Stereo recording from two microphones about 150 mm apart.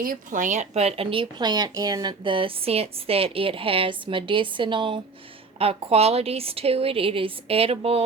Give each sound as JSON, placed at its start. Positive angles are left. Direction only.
{"t": 0.0, "sound": "speech", "side_deg": -65}